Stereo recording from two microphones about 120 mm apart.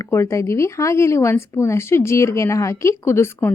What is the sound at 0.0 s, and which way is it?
Speech, 25° left (ahead or behind).